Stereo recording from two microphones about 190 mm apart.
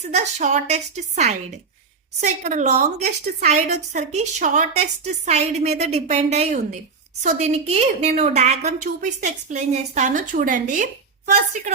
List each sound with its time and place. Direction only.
0.0 s a woman's voice: 35° right (ahead or behind)